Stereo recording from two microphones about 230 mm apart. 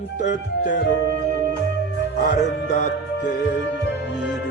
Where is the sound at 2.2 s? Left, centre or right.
Left.